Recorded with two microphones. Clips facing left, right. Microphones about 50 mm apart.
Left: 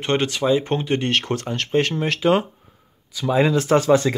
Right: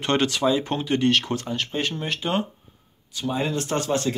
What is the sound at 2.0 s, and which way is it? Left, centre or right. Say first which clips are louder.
Speech: left 7 dB; left.